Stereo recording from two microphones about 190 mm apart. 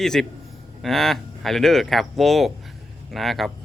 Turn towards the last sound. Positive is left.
turn(degrees=0)  # may be behind; listen again after turning